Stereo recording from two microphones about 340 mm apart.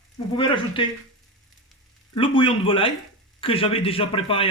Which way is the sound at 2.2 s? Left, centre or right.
Centre.